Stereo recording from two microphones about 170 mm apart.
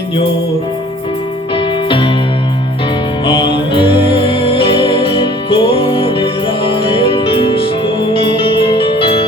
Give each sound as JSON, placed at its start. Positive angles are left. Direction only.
{"t": 1.5, "sound": "music", "side_deg": 30}
{"t": 3.2, "sound": "music", "side_deg": 30}